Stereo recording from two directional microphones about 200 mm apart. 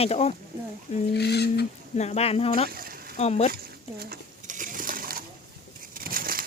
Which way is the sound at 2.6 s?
45° right (ahead or behind).